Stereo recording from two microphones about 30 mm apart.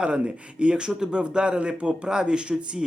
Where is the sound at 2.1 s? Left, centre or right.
Right.